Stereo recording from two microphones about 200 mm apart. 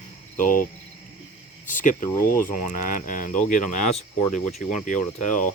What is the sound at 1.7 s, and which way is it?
Speech, 40° left (ahead or behind).